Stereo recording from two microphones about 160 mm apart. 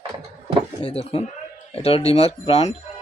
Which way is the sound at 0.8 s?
35° left (ahead or behind).